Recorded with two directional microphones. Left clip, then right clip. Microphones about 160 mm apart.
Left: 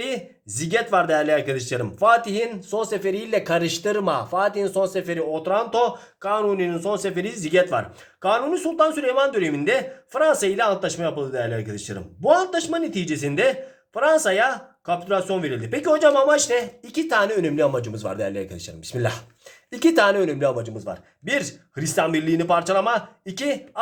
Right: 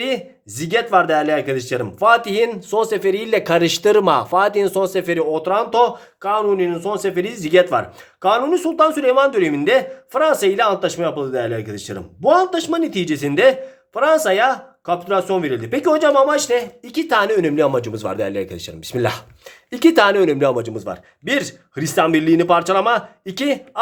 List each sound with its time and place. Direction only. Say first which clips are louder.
0.0 s speech: right 6 dB; 20° right (ahead or behind)
6.2 s speech: right 4 dB; 15° right (ahead or behind); by 21.3 s 45° right (ahead or behind)
21.3 s speech: right 3 dB; 35° right (ahead or behind)